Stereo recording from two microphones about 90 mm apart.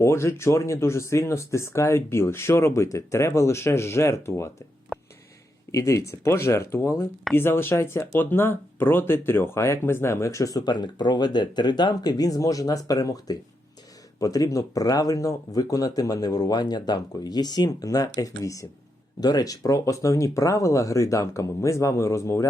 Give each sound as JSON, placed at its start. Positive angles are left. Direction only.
{"t": 0.0, "sound": "speech", "side_deg": 30}
{"t": 4.9, "sound": "a sound", "side_deg": 0}
{"t": 5.7, "sound": "speech", "side_deg": 35}